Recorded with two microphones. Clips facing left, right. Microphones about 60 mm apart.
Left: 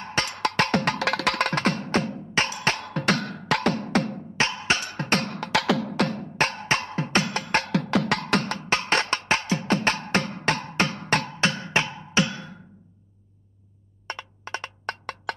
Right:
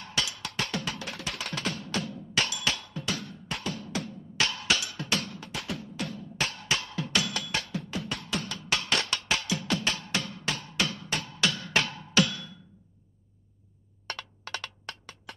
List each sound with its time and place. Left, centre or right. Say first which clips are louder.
0.0 s music: left 8 dB; left
2.9 s music: left 10 dB; left
4.4 s music: left 4 dB; left
7.6 s music: left 11 dB; left
11.3 s music: left 4 dB; left
14.0 s wood block: left 4 dB; left
14.9 s music: left 12 dB; left